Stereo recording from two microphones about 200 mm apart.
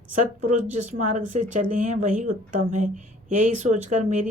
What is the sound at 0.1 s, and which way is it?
Speech, 35° right (ahead or behind).